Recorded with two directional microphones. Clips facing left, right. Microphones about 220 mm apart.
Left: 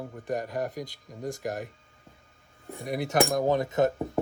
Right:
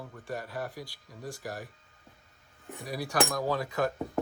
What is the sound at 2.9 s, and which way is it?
Speech, 20° left (ahead or behind).